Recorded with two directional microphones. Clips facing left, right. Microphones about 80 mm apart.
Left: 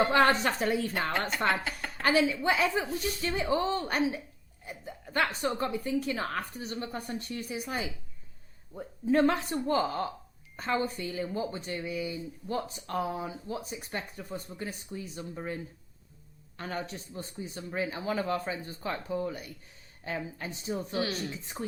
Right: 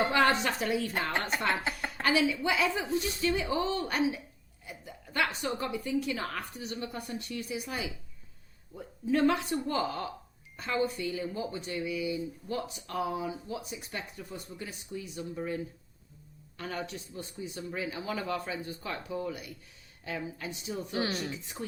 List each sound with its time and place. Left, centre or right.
0.1 s speech: left
16.6 s speech: left
20.9 s speech: right